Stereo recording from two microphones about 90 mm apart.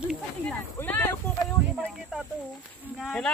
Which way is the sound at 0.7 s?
20° left (ahead or behind).